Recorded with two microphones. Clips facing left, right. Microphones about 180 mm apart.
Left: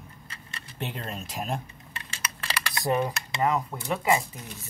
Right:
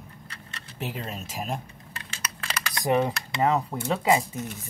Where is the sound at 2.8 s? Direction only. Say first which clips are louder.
Right 3 dB; 20° right (ahead or behind).